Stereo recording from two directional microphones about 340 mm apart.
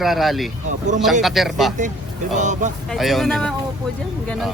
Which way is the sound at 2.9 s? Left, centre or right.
Centre.